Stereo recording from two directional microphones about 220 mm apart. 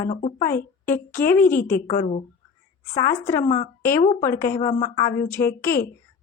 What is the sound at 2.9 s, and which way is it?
Speech, 10° left (ahead or behind).